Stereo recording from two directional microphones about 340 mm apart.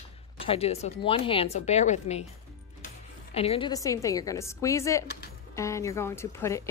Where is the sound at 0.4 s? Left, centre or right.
Centre.